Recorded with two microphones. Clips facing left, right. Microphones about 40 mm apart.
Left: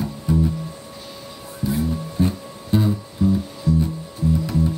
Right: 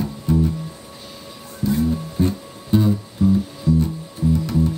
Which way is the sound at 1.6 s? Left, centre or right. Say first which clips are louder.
Right 3 dB; centre.